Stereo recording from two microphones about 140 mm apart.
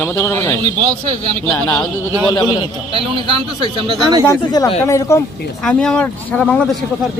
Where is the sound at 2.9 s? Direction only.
40° right (ahead or behind).